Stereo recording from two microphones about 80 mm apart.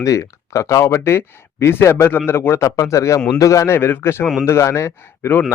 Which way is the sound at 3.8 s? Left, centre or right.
Left.